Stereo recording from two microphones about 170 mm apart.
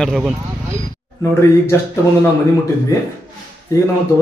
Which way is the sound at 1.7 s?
15° left (ahead or behind).